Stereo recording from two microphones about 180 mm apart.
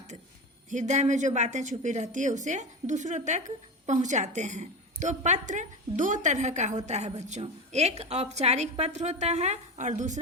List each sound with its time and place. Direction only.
0.7 s a woman's voice: 40° right (ahead or behind)